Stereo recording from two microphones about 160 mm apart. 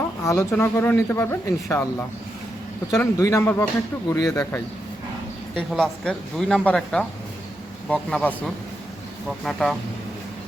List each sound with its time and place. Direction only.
0.3 s speech: 15° left (ahead or behind)
5.5 s speech: 5° left (ahead or behind)